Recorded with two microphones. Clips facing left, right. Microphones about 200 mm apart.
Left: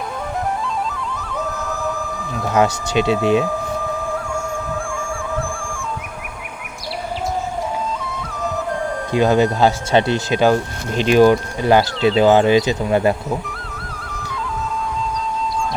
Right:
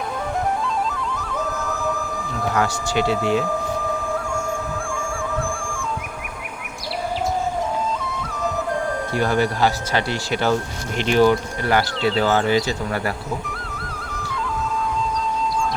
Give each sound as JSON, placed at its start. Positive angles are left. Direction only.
{"t": 2.5, "sound": "speech", "side_deg": 20}
{"t": 9.1, "sound": "speech", "side_deg": 20}